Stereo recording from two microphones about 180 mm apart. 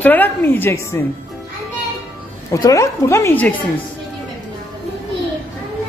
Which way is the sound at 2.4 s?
20° left (ahead or behind).